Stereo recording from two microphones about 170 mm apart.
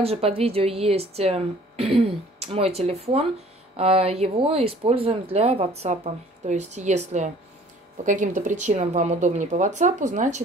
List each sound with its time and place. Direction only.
0.0 s a woman's voice: 35° right (ahead or behind)